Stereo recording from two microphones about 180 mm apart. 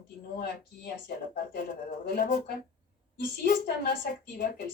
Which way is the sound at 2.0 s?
60° left (ahead or behind).